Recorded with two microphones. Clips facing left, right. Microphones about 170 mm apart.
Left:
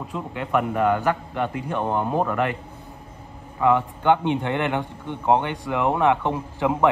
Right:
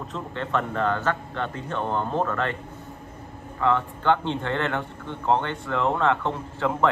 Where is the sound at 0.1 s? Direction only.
10° left (ahead or behind).